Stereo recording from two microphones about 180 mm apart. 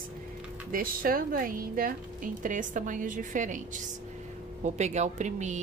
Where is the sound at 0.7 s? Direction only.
50° right (ahead or behind).